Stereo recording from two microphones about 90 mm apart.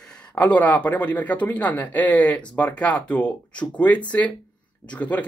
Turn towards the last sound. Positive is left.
turn(degrees=15)  # may be behind; listen again after turning